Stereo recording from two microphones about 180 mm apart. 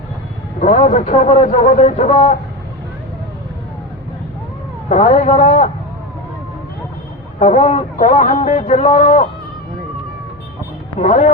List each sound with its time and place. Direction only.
0.6 s speech: 40° left (ahead or behind)
4.9 s speech: 40° left (ahead or behind)
7.3 s speech: 40° left (ahead or behind)
11.0 s speech: 45° left (ahead or behind)